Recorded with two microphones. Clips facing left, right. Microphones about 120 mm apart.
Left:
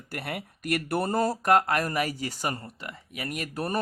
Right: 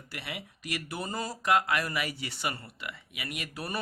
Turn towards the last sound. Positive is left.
turn(degrees=45)  # may be behind; listen again after turning